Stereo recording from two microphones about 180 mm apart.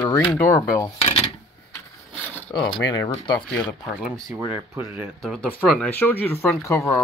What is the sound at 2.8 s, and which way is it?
Speech, 90° left.